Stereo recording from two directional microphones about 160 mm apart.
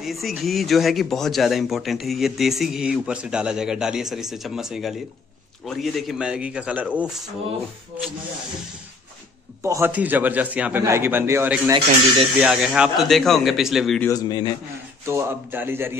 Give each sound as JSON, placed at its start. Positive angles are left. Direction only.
{"t": 0.0, "sound": "speech", "side_deg": 0}
{"t": 9.6, "sound": "a man's voice", "side_deg": -15}
{"t": 14.0, "sound": "a man's voice", "side_deg": 25}
{"t": 15.0, "sound": "a man's voice", "side_deg": -15}